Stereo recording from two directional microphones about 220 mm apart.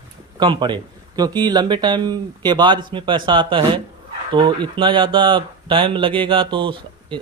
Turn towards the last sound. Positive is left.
turn(degrees=-20)  # may be behind; listen again after turning